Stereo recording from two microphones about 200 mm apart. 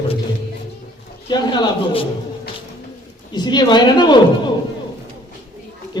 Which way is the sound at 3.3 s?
20° left (ahead or behind).